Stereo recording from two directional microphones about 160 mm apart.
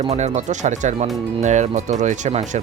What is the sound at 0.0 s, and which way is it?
Speech, 40° right (ahead or behind).